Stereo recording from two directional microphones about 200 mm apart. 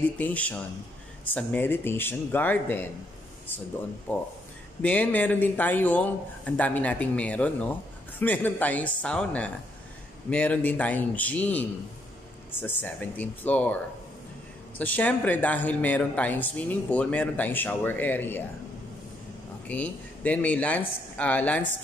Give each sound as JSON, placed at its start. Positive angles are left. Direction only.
{"t": 0.2, "sound": "speech", "side_deg": 5}
{"t": 4.1, "sound": "speech", "side_deg": 10}
{"t": 14.8, "sound": "speech", "side_deg": 10}
{"t": 19.7, "sound": "speech", "side_deg": 5}